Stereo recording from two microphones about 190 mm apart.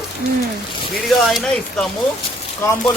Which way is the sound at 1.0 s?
Centre (ahead or behind).